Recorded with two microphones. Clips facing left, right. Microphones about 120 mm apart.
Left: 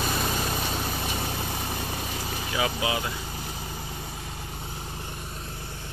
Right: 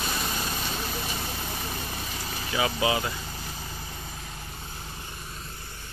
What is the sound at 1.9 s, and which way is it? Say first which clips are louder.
Vehicle: left 3 dB; 15° left (ahead or behind).